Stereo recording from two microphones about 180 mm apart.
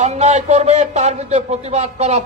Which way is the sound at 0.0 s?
40° right (ahead or behind).